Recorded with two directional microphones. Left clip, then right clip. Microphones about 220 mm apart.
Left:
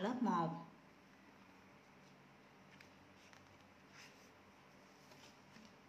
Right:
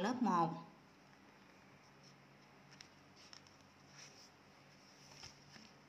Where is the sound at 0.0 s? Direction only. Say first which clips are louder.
Right 3 dB; 15° right (ahead or behind).